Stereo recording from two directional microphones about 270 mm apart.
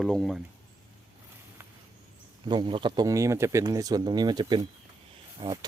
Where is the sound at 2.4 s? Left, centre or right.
Centre.